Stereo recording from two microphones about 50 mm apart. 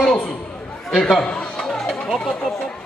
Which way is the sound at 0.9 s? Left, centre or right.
Centre.